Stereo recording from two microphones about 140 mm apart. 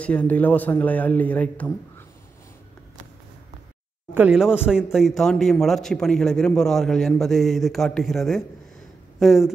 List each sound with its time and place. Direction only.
0.0 s a man's voice: 10° left (ahead or behind)
4.1 s a man's voice: 10° right (ahead or behind)